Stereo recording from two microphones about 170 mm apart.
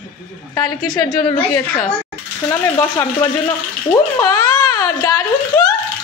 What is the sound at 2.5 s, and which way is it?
Speech, 15° left (ahead or behind).